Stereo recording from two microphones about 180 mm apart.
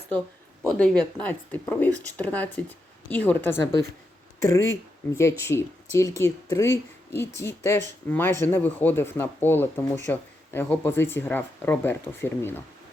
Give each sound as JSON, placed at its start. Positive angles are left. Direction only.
{"t": 0.7, "sound": "speech", "side_deg": 5}